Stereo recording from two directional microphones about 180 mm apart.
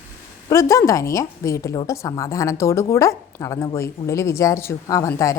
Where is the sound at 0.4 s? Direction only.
15° left (ahead or behind).